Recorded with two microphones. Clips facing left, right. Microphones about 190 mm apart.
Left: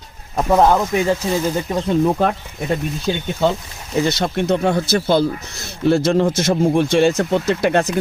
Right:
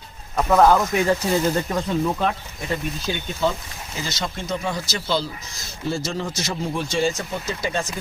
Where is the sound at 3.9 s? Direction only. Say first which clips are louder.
Left 11 dB; 60° left (ahead or behind).